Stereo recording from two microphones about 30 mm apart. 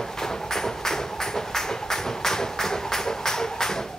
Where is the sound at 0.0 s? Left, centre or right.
Centre.